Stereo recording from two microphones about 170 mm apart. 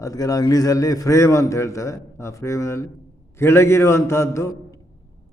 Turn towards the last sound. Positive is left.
turn(degrees=15)  # may be behind; listen again after turning